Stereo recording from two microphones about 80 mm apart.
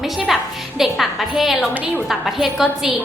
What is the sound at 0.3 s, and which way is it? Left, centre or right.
A woman's voice, centre.